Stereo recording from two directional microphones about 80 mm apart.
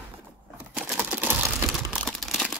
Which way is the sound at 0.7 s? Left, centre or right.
Centre.